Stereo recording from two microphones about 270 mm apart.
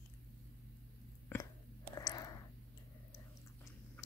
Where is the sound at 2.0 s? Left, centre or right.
Centre.